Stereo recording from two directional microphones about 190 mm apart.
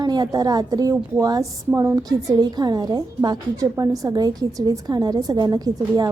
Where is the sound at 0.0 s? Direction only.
20° right (ahead or behind).